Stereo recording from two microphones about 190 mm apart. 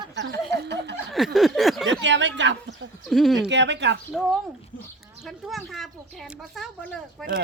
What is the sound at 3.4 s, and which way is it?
Speech, 65° right (ahead or behind).